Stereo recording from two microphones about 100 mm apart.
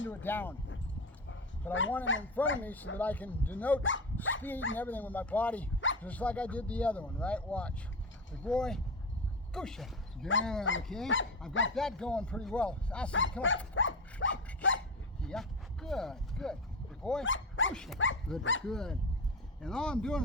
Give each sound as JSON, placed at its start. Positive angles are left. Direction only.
{"t": 0.1, "sound": "speech", "side_deg": 20}
{"t": 1.6, "sound": "speech", "side_deg": 20}
{"t": 15.2, "sound": "speech", "side_deg": 5}